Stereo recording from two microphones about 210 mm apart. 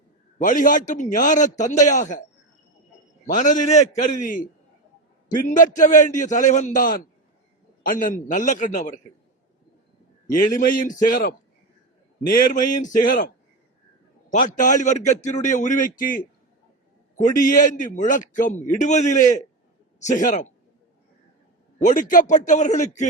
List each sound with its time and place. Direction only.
0.4 s a man's voice: 40° left (ahead or behind)
3.2 s a man's voice: 35° left (ahead or behind)
5.5 s a man's voice: 35° left (ahead or behind)
10.4 s a man's voice: 40° left (ahead or behind)
14.3 s a man's voice: 40° left (ahead or behind)
17.4 s a man's voice: 40° left (ahead or behind)
21.8 s a man's voice: 40° left (ahead or behind)